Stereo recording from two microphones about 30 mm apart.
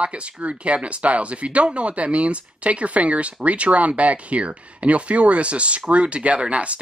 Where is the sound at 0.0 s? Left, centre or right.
Right.